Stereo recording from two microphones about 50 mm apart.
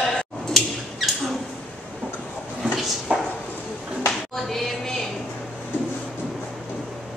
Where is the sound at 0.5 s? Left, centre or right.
Centre.